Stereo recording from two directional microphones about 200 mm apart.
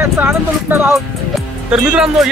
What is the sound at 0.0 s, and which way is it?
A man's voice, 10° right (ahead or behind).